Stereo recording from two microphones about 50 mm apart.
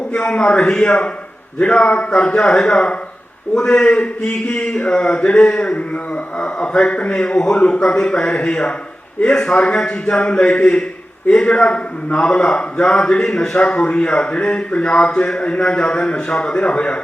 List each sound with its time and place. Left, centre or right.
0.1 s a man's voice: left